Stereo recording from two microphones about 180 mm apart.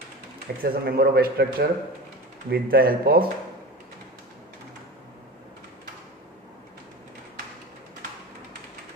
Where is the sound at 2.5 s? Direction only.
55° right (ahead or behind).